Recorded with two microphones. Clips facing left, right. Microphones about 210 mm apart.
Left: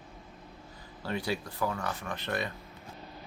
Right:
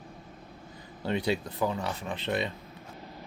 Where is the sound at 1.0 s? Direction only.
20° right (ahead or behind).